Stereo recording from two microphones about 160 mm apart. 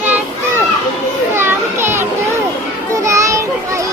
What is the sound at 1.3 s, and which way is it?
Children playing, 15° right (ahead or behind).